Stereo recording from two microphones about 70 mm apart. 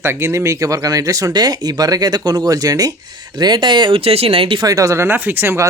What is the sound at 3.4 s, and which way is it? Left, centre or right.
Speech, right.